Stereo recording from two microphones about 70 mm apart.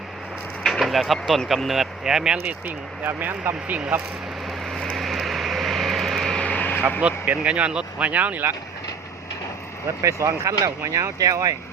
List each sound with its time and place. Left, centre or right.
0.6 s speech: centre
3.0 s speech: right
4.6 s vehicle: centre
6.4 s vehicle: left
7.0 s speech: centre
9.8 s speech: right